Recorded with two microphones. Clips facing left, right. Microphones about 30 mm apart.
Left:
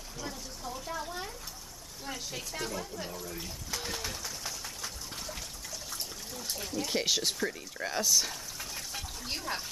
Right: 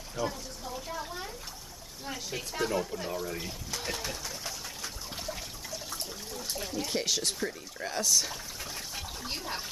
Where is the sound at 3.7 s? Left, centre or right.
Centre.